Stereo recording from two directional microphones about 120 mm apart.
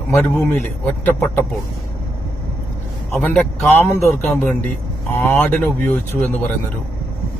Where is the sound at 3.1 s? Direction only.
10° left (ahead or behind).